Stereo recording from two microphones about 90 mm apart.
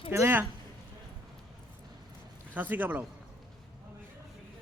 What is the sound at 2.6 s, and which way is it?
Speech, 20° right (ahead or behind).